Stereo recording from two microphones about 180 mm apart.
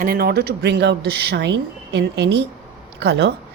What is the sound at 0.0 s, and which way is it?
A woman's voice, 55° right (ahead or behind).